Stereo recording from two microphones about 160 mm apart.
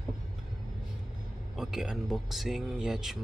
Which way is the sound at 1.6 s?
5° right (ahead or behind).